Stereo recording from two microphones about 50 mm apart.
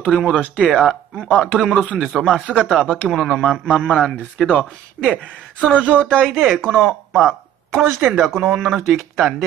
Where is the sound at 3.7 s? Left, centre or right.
Centre.